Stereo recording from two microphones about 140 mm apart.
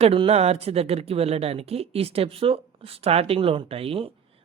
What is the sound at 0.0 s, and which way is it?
Speech, 45° right (ahead or behind).